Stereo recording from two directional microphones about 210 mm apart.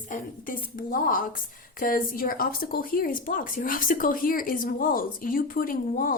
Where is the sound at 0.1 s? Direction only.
40° left (ahead or behind).